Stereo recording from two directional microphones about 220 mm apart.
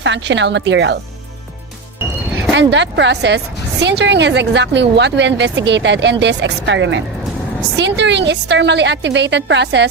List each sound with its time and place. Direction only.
0.0 s speech: 55° right (ahead or behind)
2.5 s speech: 55° right (ahead or behind)